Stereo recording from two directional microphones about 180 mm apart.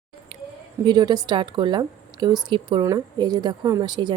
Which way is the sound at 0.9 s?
25° right (ahead or behind).